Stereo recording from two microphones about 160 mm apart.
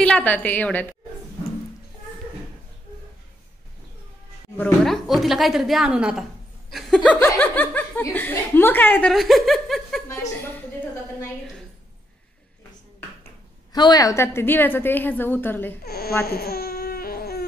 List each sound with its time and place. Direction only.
0.0 s speech: 10° left (ahead or behind)
4.6 s speech: 5° left (ahead or behind)
9.1 s speech: centre (ahead or behind)
13.7 s speech: 25° left (ahead or behind)
15.8 s speech: 75° left (ahead or behind)
16.3 s baby cry: 75° left (ahead or behind)